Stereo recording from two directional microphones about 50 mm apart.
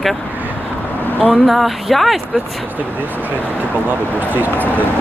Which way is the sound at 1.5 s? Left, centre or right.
Centre.